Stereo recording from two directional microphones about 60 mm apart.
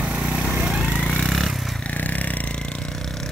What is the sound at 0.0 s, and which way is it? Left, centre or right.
Vehicle, right.